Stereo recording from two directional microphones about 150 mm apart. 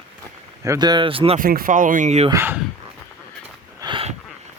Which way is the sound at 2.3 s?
15° right (ahead or behind).